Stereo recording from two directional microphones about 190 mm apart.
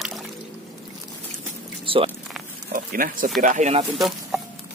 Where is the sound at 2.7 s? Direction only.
50° right (ahead or behind).